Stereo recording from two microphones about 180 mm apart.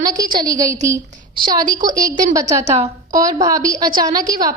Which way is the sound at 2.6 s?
40° right (ahead or behind).